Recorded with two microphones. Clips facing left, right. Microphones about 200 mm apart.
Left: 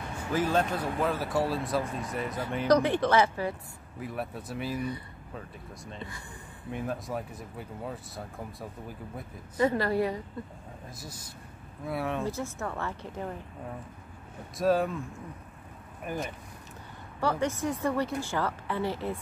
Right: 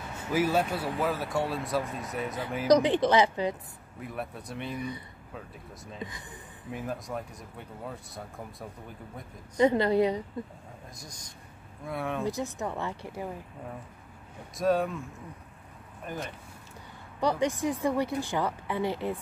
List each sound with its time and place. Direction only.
0.3 s speech: 10° right (ahead or behind)
2.8 s speech: 15° right (ahead or behind)
4.0 s speech: centre (ahead or behind)
6.7 s speech: centre (ahead or behind)
9.6 s a woman's voice: 20° right (ahead or behind)
11.0 s speech: 5° left (ahead or behind)
12.3 s speech: 15° right (ahead or behind)
14.6 s speech: centre (ahead or behind)
17.2 s speech: 15° right (ahead or behind)